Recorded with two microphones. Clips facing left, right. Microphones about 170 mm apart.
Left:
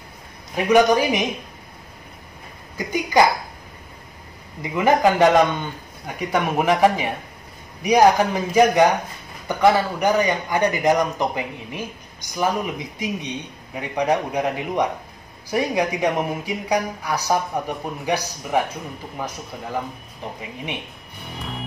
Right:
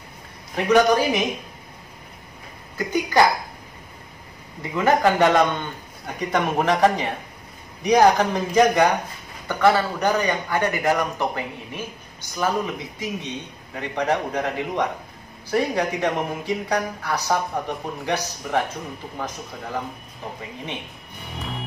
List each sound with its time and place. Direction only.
0.6 s a man's voice: 10° left (ahead or behind)
2.9 s a man's voice: 15° left (ahead or behind)
4.7 s a man's voice: 15° left (ahead or behind)
21.3 s music: centre (ahead or behind)